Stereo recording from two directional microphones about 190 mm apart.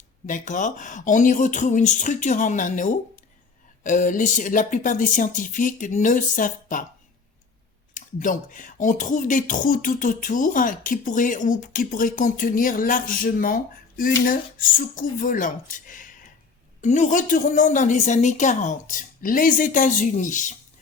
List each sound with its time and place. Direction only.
0.3 s speech: 40° left (ahead or behind)
7.9 s speech: 45° left (ahead or behind)